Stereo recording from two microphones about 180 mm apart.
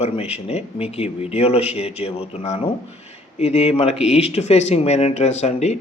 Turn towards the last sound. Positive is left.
turn(degrees=35)  # may be behind; listen again after turning